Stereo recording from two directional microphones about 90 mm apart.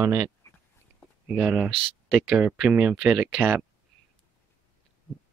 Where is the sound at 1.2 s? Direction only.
15° right (ahead or behind).